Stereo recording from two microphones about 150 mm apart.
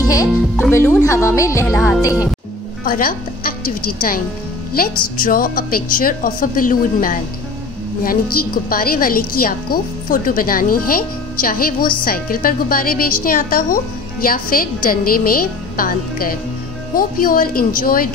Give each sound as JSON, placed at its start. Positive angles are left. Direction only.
{"t": 0.1, "sound": "speech", "side_deg": 20}
{"t": 2.8, "sound": "a woman's voice", "side_deg": 75}